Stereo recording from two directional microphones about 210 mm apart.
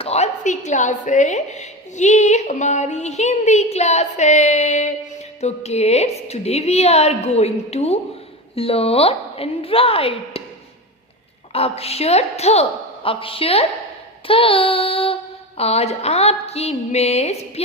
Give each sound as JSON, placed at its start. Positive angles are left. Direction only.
{"t": 0.0, "sound": "a woman's voice", "side_deg": 30}
{"t": 8.5, "sound": "child singing", "side_deg": 25}
{"t": 11.5, "sound": "child singing", "side_deg": 30}